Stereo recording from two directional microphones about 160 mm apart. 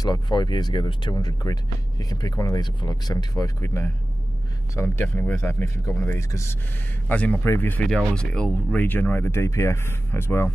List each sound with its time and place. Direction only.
0.0 s speech: 25° left (ahead or behind)